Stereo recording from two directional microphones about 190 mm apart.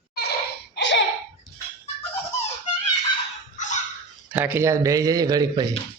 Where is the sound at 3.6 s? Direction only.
40° left (ahead or behind).